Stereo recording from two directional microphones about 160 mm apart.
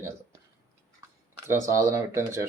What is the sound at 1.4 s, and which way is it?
Speech, 15° right (ahead or behind).